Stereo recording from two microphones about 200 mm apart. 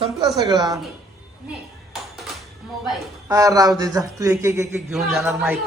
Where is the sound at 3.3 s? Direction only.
15° right (ahead or behind).